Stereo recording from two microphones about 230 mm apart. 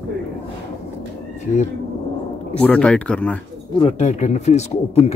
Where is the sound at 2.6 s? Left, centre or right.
Centre.